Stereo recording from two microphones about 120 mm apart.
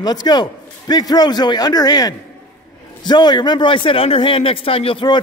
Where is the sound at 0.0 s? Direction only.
35° left (ahead or behind).